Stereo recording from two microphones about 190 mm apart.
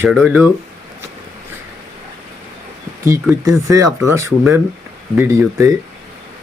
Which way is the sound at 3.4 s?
15° right (ahead or behind).